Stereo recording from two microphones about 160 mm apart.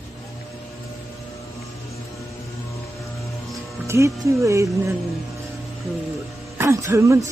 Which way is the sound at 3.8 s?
20° right (ahead or behind).